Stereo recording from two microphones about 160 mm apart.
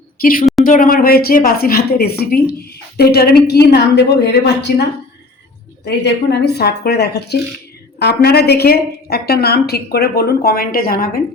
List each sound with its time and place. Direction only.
0.2 s a woman's voice: 60° left (ahead or behind); by 4.9 s 90° left
6.3 s a woman's voice: 90° left; by 11.2 s 65° left (ahead or behind)